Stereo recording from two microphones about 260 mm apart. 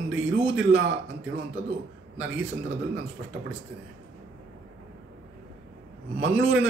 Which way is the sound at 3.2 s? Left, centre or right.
Right.